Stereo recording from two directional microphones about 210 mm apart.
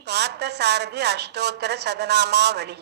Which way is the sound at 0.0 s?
50° right (ahead or behind).